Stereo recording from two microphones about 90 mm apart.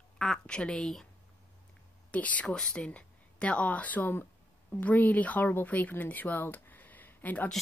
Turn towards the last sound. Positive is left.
turn(degrees=20)  # may be behind; listen again after turning